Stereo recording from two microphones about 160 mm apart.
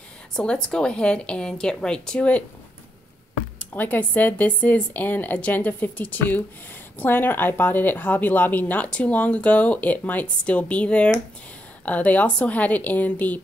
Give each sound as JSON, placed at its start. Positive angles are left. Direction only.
{"t": 0.4, "sound": "a woman's voice", "side_deg": 5}
{"t": 3.7, "sound": "speech", "side_deg": 10}